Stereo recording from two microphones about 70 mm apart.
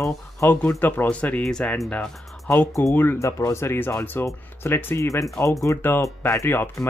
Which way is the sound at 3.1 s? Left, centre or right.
Left.